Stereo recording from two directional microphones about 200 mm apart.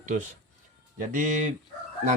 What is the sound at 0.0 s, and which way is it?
Speech, 40° right (ahead or behind).